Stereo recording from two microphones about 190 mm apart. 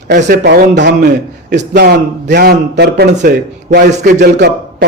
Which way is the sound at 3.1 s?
50° right (ahead or behind).